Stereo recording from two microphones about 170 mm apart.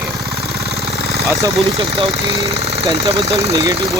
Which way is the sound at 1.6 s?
35° right (ahead or behind).